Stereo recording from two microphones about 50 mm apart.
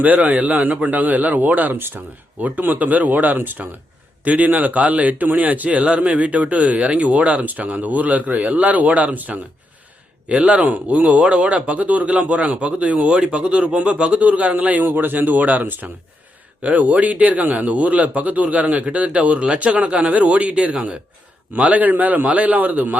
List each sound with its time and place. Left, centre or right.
0.0 s a man's voice: right
2.4 s a man's voice: right